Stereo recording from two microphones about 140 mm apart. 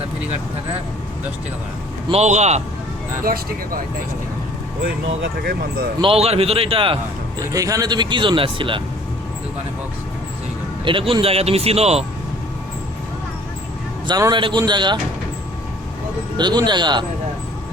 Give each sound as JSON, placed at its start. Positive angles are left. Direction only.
{"t": 2.0, "sound": "speech", "side_deg": -50}
{"t": 3.2, "sound": "speech", "side_deg": -90}
{"t": 5.4, "sound": "speech", "side_deg": -90}
{"t": 6.0, "sound": "speech", "side_deg": -45}
{"t": 7.3, "sound": "speech", "side_deg": -25}
{"t": 10.8, "sound": "speech", "side_deg": -35}
{"t": 14.1, "sound": "speech", "side_deg": -30}
{"t": 16.4, "sound": "speech", "side_deg": -30}